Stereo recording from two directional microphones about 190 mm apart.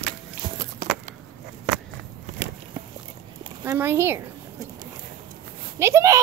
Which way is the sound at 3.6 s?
10° right (ahead or behind).